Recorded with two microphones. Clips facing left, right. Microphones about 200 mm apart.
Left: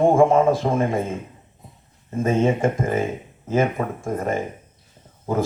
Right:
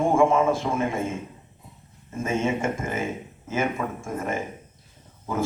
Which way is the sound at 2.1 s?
35° left (ahead or behind).